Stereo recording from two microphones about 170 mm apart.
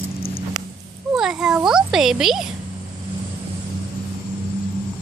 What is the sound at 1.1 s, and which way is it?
A child's voice, 5° right (ahead or behind).